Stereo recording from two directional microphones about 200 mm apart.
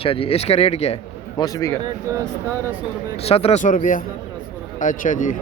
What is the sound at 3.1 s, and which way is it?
Speech, 30° left (ahead or behind).